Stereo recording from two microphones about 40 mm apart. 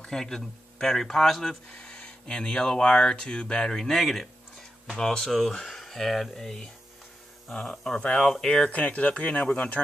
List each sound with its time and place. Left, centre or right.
0.0 s speech: centre
1.7 s speech: left; by 6.5 s centre
7.7 s speech: centre
8.6 s speech: left